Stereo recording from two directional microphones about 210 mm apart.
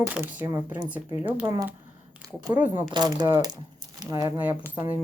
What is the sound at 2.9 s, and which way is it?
Speech, 20° right (ahead or behind).